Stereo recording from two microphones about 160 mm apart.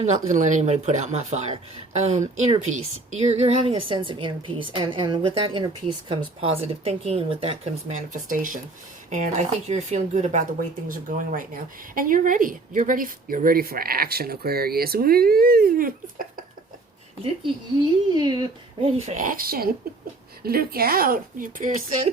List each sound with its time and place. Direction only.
0.0 s a woman's voice: 45° right (ahead or behind)
9.0 s speech: 45° right (ahead or behind)
10.8 s speech: 60° right (ahead or behind)
18.1 s speech: 25° right (ahead or behind); by 22.1 s 55° right (ahead or behind)